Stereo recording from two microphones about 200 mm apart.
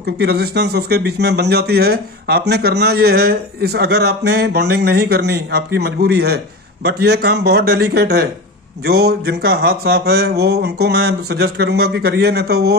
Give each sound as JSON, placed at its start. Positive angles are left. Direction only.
{"t": 0.0, "sound": "speech", "side_deg": -55}